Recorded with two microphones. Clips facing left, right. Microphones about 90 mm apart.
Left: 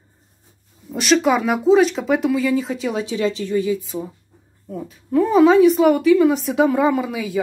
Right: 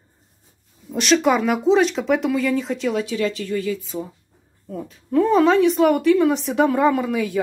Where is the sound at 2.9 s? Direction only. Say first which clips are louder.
Left 1 dB; 20° left (ahead or behind).